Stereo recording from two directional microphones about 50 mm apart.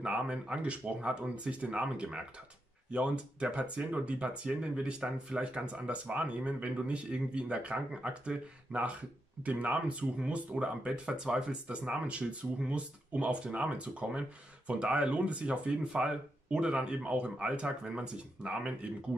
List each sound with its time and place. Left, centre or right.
0.0 s speech: centre